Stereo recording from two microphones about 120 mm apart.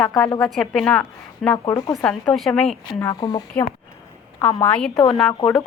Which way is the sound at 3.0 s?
30° left (ahead or behind).